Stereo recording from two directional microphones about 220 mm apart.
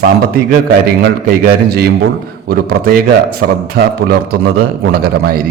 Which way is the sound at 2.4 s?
45° right (ahead or behind).